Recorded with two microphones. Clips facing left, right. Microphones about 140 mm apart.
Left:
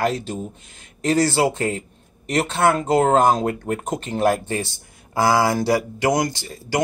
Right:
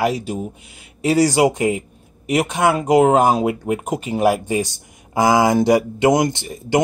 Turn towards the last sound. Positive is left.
turn(degrees=-20)  # may be behind; listen again after turning